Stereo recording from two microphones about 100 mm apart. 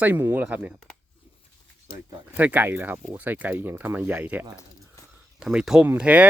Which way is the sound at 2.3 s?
15° right (ahead or behind).